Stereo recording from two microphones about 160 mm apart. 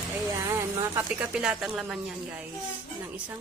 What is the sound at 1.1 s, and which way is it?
Speech, 5° right (ahead or behind).